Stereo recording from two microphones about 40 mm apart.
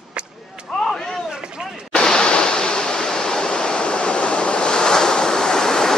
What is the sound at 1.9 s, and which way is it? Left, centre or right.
Waves, centre.